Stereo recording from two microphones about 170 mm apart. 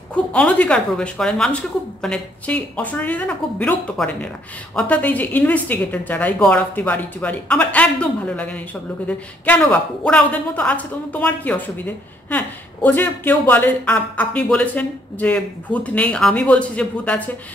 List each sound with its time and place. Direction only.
0.1 s speech: 5° left (ahead or behind)